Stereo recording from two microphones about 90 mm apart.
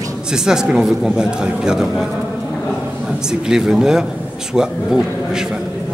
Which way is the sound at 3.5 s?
5° right (ahead or behind).